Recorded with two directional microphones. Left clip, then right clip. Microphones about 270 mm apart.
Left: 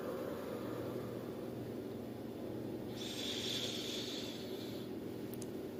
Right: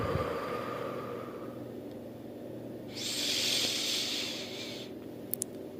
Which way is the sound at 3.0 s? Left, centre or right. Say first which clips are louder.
Right 11 dB; right.